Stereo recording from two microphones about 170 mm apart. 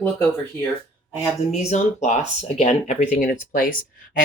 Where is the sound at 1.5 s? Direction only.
45° left (ahead or behind).